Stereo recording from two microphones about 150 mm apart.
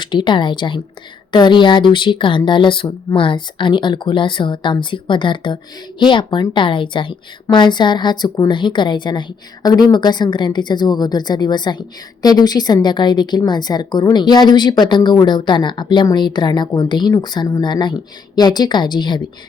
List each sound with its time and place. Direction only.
0.0 s a woman's voice: 30° left (ahead or behind)